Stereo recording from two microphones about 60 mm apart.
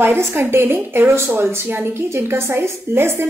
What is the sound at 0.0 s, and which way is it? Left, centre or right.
A woman's voice, right.